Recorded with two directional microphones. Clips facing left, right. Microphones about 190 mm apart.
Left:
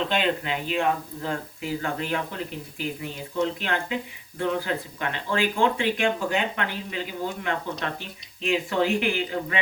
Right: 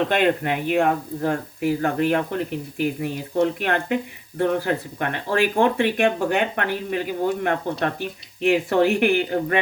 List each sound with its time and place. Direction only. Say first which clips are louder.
0.0 s speech: right 5 dB; 55° right (ahead or behind)
8.4 s speech: right 6 dB; 65° right (ahead or behind)